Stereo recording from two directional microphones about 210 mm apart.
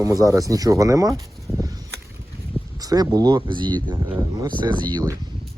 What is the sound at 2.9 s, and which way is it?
Speech, 20° right (ahead or behind).